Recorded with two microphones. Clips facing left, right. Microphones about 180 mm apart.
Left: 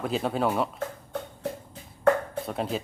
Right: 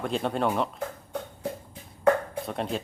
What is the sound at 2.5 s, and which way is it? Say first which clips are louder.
Speech: even; 5° left (ahead or behind).